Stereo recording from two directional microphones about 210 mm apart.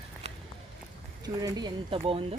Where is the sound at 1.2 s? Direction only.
20° right (ahead or behind).